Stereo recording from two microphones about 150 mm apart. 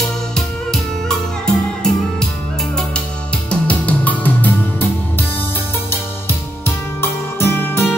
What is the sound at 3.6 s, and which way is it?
Music, 10° left (ahead or behind).